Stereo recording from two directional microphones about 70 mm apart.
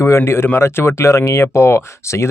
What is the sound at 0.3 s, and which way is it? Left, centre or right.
Speech, left.